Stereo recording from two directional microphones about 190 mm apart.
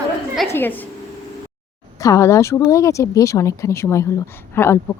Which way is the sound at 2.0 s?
15° left (ahead or behind).